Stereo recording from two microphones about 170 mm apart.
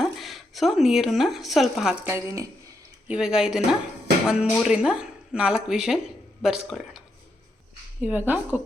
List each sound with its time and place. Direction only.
0.0 s speech: centre (ahead or behind)
2.1 s speech: 20° right (ahead or behind)
3.1 s speech: 5° right (ahead or behind)
8.1 s speech: 10° right (ahead or behind)